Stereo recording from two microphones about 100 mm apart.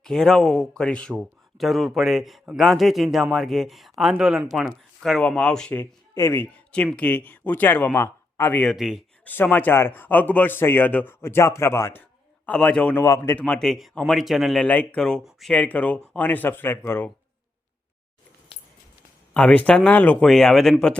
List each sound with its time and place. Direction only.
0.0 s speech: 5° left (ahead or behind)
5.8 s speech: 25° left (ahead or behind)
6.7 s speech: 10° left (ahead or behind)
8.7 s speech: 5° right (ahead or behind)
9.2 s speech: 15° left (ahead or behind)
12.5 s speech: 10° left (ahead or behind)
13.0 s speech: 25° left (ahead or behind)
13.4 s speech: 5° left (ahead or behind)
14.7 s speech: 10° left (ahead or behind)
19.3 s speech: 10° left (ahead or behind)
20.2 s speech: 5° left (ahead or behind)